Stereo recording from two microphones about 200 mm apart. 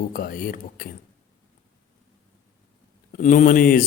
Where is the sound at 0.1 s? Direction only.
45° left (ahead or behind).